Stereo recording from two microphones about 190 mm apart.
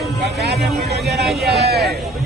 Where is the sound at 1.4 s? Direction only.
60° right (ahead or behind).